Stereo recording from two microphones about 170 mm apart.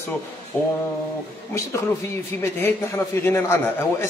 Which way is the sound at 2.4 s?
15° left (ahead or behind).